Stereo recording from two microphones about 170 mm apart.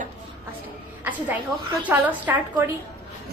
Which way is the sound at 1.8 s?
10° right (ahead or behind).